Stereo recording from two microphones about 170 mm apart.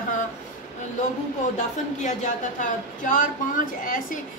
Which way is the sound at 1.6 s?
45° left (ahead or behind).